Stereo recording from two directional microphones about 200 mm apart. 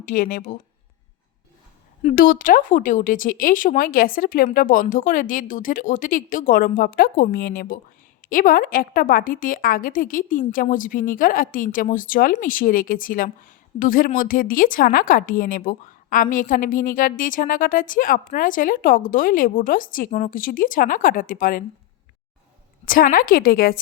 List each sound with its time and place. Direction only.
0.0 s speech: 40° left (ahead or behind)
2.0 s a woman's voice: 40° left (ahead or behind)
22.9 s a woman's voice: 45° left (ahead or behind)